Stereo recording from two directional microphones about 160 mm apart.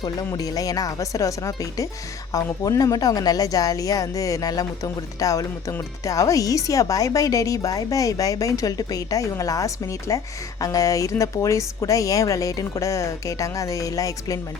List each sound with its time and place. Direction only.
0.0 s speech: 25° left (ahead or behind)